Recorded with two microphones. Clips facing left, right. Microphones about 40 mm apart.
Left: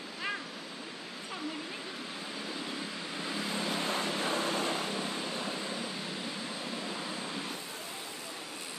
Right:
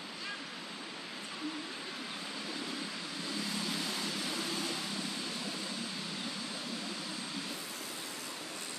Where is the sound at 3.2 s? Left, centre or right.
Left.